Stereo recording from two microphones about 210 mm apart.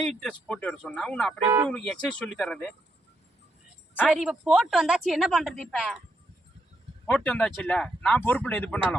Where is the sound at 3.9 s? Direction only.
5° left (ahead or behind).